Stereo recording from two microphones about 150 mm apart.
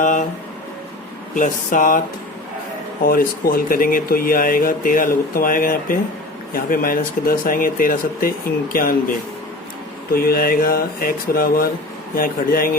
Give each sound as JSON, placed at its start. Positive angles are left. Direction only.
{"t": 0.0, "sound": "a sound", "side_deg": 60}
{"t": 1.4, "sound": "speech", "side_deg": 65}
{"t": 3.1, "sound": "speech", "side_deg": 70}